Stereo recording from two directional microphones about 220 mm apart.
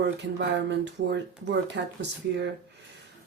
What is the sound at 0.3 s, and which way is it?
Speech, 55° right (ahead or behind).